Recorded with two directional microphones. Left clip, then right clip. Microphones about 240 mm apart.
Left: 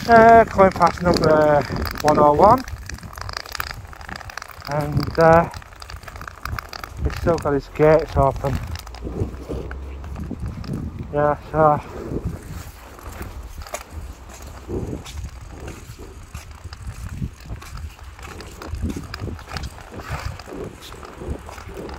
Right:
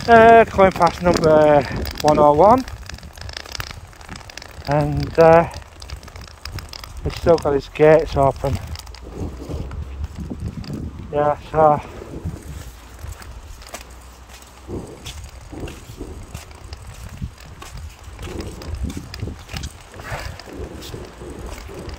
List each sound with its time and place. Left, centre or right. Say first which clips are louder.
0.3 s speech: right 1 dB; right
4.7 s speech: right 4 dB; right
7.2 s speech: right 5 dB; right
11.1 s speech: right 1 dB; right